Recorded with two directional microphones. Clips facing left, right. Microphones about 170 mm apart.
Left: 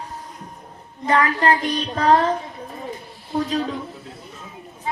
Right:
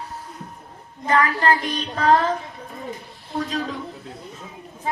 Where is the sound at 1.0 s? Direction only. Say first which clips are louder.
Left 1 dB; 30° left (ahead or behind).